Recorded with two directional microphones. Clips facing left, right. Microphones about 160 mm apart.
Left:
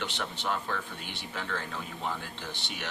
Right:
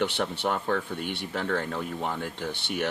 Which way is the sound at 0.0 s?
55° right (ahead or behind).